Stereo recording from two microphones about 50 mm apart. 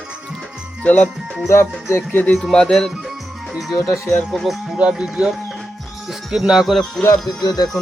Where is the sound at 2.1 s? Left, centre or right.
Left.